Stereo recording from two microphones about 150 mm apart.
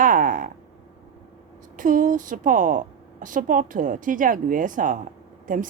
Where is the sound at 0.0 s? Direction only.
65° right (ahead or behind).